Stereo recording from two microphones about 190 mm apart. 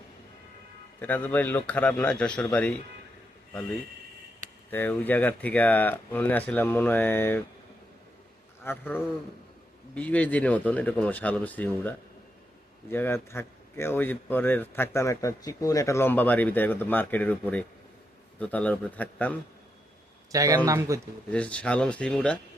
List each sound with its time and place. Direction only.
0.9 s speech: 10° left (ahead or behind)
4.7 s speech: 10° left (ahead or behind)
8.6 s speech: 10° left (ahead or behind)
20.3 s a man's voice: 15° right (ahead or behind)
21.3 s speech: 5° left (ahead or behind)